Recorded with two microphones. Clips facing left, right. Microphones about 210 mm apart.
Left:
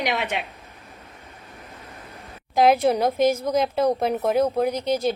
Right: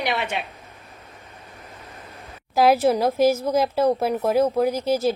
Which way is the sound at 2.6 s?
5° right (ahead or behind).